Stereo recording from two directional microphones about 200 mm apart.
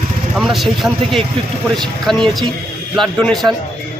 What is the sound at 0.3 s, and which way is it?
Speech, centre (ahead or behind).